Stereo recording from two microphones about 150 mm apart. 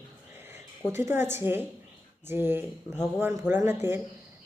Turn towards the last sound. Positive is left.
turn(degrees=-15)  # may be behind; listen again after turning